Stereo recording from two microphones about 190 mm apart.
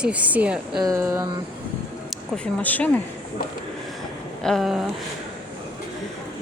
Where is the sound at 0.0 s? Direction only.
5° right (ahead or behind).